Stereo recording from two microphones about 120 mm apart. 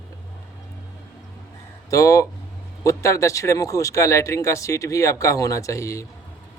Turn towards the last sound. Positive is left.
turn(degrees=25)  # may be behind; listen again after turning